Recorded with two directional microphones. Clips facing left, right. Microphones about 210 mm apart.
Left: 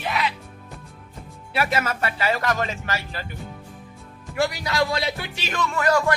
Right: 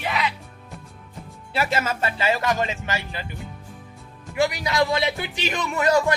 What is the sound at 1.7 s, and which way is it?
Speech, 25° right (ahead or behind).